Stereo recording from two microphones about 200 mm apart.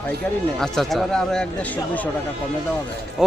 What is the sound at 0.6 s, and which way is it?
Speech, centre (ahead or behind).